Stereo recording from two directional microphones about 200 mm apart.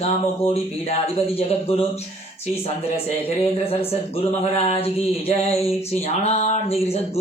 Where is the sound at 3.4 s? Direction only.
30° left (ahead or behind).